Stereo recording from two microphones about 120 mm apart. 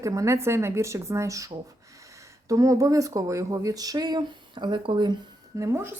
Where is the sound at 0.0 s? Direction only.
25° right (ahead or behind).